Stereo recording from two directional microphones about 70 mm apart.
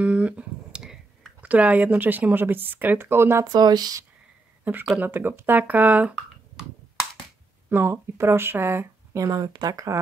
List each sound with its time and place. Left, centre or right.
0.0 s finger snapping: centre
1.4 s speech: right
3.5 s speech: right
4.9 s speech: right
7.7 s speech: right
9.2 s speech: right